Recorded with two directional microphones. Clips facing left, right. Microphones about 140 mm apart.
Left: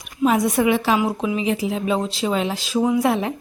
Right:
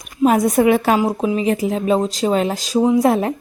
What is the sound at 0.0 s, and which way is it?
A woman's voice, 45° right (ahead or behind).